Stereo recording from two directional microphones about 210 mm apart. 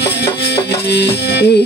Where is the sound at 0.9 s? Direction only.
55° left (ahead or behind).